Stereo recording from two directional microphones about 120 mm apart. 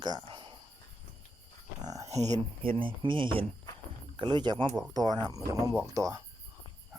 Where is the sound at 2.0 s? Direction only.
70° right (ahead or behind).